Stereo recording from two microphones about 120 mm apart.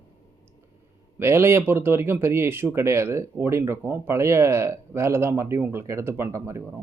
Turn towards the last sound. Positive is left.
turn(degrees=-25)  # may be behind; listen again after turning